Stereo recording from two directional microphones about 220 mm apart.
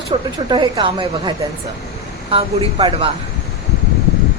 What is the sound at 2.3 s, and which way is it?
Speech, 25° right (ahead or behind).